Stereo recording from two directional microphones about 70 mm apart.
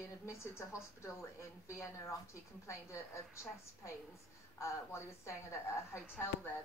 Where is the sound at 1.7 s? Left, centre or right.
Left.